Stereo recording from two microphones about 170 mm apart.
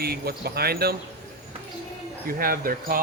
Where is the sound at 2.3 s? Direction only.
60° right (ahead or behind).